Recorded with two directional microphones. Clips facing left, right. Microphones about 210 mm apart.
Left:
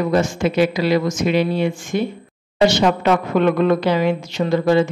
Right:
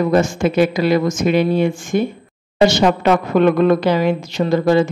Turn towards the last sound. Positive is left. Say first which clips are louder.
# right 2 dB
turn(degrees=-40)  # may be behind; listen again after turning